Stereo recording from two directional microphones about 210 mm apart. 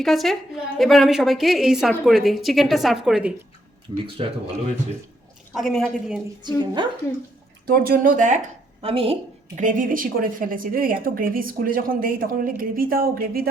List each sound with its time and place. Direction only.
0.0 s a woman's voice: centre (ahead or behind)
3.9 s a woman's voice: 25° right (ahead or behind)
5.5 s a woman's voice: centre (ahead or behind)
6.4 s a woman's voice: 20° right (ahead or behind)
7.7 s speech: 45° right (ahead or behind)
8.8 s a woman's voice: 25° right (ahead or behind)
9.6 s speech: 40° right (ahead or behind)